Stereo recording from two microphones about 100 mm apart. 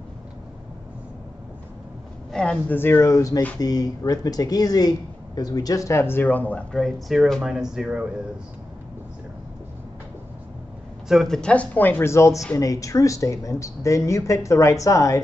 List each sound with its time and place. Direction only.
2.3 s speech: 10° left (ahead or behind)
2.8 s speech: 25° left (ahead or behind)
6.7 s speech: centre (ahead or behind)
11.1 s speech: centre (ahead or behind); by 15.1 s 30° left (ahead or behind)